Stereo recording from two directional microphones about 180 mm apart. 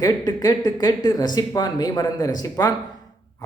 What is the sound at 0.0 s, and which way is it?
Speech, 20° left (ahead or behind).